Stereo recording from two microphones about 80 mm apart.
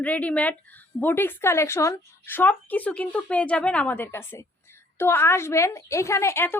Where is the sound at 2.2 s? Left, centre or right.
Left.